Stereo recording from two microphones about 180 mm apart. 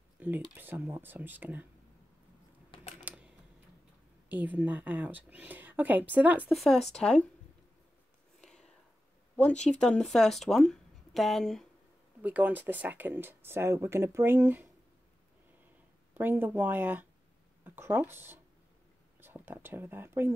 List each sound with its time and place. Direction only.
0.2 s a woman's voice: 10° right (ahead or behind)
2.7 s typing: 35° left (ahead or behind)
4.3 s a woman's voice: 10° right (ahead or behind)
8.4 s whispering: 5° left (ahead or behind)
9.7 s speech: 5° left (ahead or behind)
12.2 s a woman's voice: 10° right (ahead or behind)
16.2 s a woman's voice: 10° right (ahead or behind)